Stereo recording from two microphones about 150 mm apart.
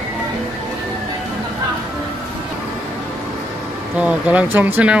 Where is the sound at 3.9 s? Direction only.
10° right (ahead or behind).